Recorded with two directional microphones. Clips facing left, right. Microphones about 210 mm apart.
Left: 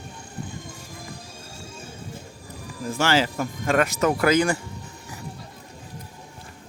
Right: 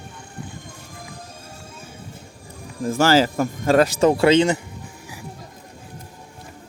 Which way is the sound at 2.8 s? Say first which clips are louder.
Right 6 dB; 45° right (ahead or behind).